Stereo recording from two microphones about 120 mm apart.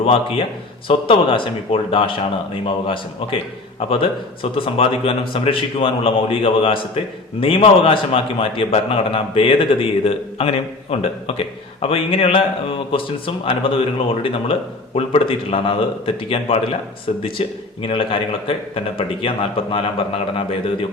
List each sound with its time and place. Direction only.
0.0 s speech: 50° left (ahead or behind)